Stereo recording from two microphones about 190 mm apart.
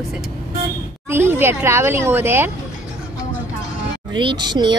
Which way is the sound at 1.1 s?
10° right (ahead or behind).